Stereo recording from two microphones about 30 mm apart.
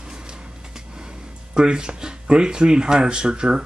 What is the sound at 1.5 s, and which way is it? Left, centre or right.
Speech, right.